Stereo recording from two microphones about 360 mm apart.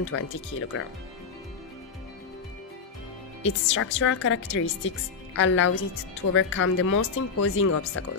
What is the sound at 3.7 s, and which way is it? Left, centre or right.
A woman's voice, left.